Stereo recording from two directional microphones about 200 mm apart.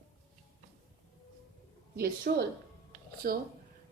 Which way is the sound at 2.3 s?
45° right (ahead or behind).